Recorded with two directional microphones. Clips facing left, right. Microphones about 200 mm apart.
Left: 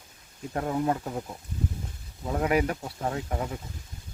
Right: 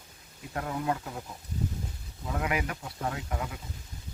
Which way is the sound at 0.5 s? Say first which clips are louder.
Left 4 dB; 30° left (ahead or behind).